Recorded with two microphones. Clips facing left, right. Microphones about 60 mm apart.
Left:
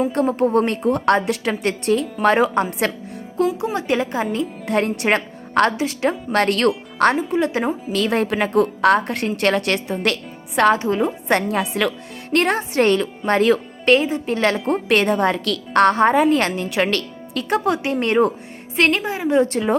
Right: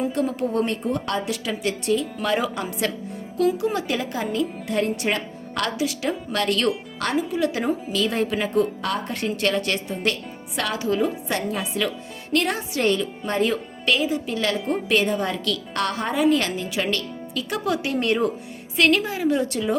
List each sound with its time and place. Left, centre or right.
0.1 s a woman's voice: left
3.4 s speech: left
4.6 s a woman's voice: left
5.5 s speech: left
7.9 s a woman's voice: left
10.6 s speech: left
11.3 s a woman's voice: left
13.8 s speech: left
14.7 s a woman's voice: left
16.6 s speech: left
17.5 s a woman's voice: left